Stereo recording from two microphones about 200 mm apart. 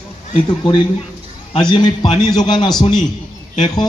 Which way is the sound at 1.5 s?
20° left (ahead or behind).